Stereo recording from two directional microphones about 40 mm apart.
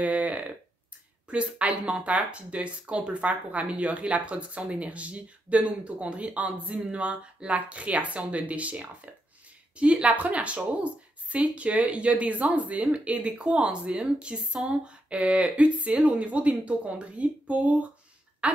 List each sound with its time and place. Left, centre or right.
0.0 s a sound: right
1.3 s a woman's voice: right
16.0 s a woman's voice: right
16.3 s speech: right